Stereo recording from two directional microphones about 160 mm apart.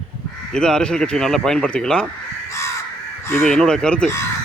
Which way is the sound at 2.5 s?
20° left (ahead or behind).